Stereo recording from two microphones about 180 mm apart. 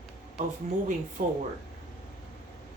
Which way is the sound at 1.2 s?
50° right (ahead or behind).